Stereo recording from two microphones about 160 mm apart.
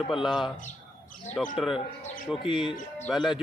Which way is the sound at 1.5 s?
Centre (ahead or behind).